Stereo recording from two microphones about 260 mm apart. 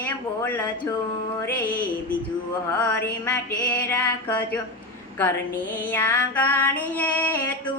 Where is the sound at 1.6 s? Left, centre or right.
Left.